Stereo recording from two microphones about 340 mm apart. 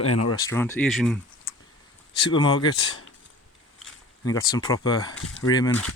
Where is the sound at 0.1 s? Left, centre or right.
Left.